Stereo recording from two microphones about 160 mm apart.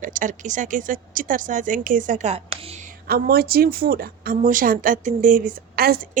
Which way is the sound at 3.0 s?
70° right (ahead or behind).